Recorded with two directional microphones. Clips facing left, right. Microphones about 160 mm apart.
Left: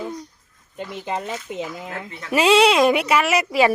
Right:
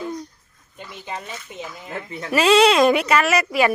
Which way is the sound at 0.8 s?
75° left (ahead or behind).